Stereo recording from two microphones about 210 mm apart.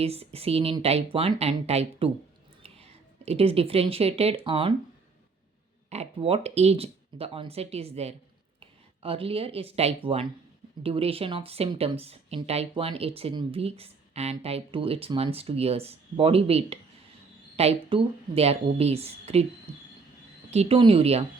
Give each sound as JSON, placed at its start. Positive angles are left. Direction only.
{"t": 0.0, "sound": "speech", "side_deg": -30}
{"t": 5.9, "sound": "speech", "side_deg": -30}
{"t": 20.5, "sound": "speech", "side_deg": -30}